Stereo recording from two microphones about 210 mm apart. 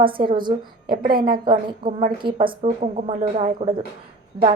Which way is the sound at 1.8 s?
40° right (ahead or behind).